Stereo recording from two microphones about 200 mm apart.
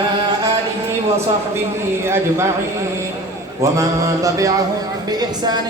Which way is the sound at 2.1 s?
15° right (ahead or behind).